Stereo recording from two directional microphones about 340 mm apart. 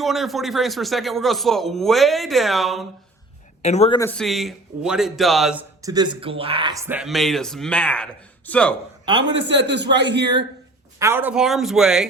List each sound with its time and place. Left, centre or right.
0.0 s speech: centre
3.6 s speech: centre
9.6 s a man's voice: right
11.0 s speech: centre